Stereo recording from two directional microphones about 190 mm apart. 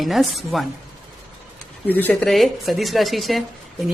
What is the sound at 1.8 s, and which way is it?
A woman's voice, 10° left (ahead or behind).